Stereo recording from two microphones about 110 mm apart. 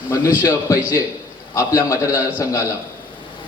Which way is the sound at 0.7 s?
25° left (ahead or behind).